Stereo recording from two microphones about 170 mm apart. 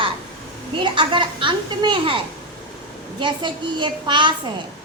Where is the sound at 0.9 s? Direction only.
30° right (ahead or behind).